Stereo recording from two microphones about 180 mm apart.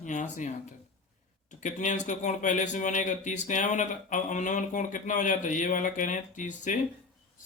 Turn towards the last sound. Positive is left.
turn(degrees=45)  # may be behind; listen again after turning